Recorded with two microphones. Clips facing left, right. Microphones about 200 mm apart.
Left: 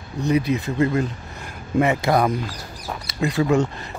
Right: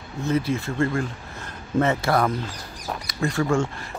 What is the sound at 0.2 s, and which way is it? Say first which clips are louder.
Speech: left 3 dB; 15° left (ahead or behind).